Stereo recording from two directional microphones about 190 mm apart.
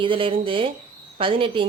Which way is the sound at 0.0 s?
25° right (ahead or behind).